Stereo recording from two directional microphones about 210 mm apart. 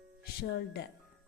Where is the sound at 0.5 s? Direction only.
50° left (ahead or behind).